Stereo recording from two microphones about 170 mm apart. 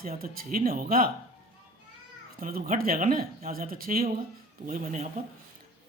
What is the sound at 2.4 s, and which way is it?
Speech, 55° right (ahead or behind).